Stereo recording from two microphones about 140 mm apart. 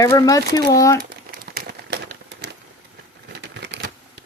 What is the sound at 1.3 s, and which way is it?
Crumpling, 90° right.